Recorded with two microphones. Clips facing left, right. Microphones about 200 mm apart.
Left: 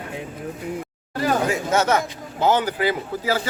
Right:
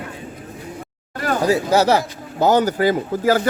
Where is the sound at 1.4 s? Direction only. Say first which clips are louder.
Right 5 dB; 35° right (ahead or behind).